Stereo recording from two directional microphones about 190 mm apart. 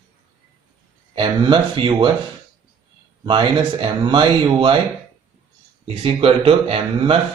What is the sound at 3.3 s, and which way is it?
Speech, 25° right (ahead or behind).